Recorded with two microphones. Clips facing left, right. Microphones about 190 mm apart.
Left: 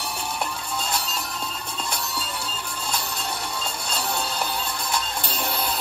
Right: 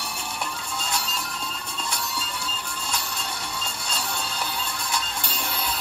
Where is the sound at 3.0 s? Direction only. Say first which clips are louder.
Left 3 dB; 40° left (ahead or behind).